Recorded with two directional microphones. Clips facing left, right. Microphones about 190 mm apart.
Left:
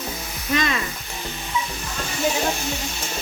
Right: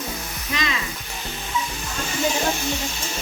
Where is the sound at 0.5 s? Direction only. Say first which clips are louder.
Left 5 dB; 50° left (ahead or behind).